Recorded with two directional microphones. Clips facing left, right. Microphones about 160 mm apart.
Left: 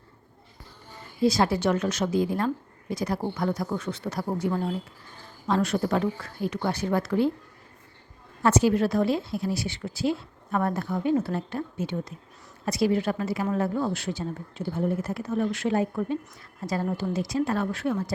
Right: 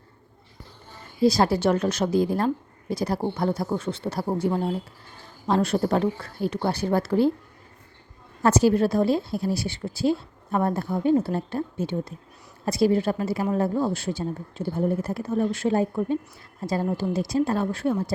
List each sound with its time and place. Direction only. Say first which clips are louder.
1.2 s a woman's voice: right 3 dB; 35° right (ahead or behind)
8.4 s a woman's voice: right 2 dB; 35° right (ahead or behind)